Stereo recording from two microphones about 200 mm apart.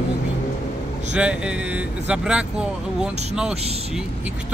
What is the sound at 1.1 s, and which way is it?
Speech, 5° right (ahead or behind).